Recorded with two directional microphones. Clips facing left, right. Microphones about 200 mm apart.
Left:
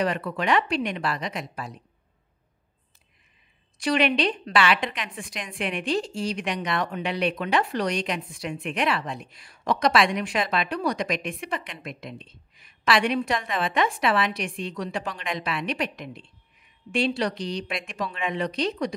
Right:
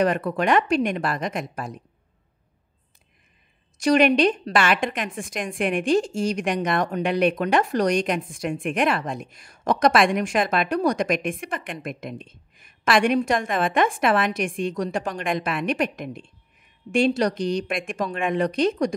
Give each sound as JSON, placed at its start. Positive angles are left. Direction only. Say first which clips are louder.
{"t": 0.0, "sound": "a woman's voice", "louder": "right 5 dB", "side_deg": -50}
{"t": 3.7, "sound": "a woman's voice", "louder": "right 5 dB", "side_deg": -45}